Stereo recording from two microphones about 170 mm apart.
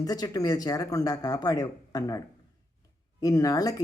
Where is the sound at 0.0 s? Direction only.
20° left (ahead or behind).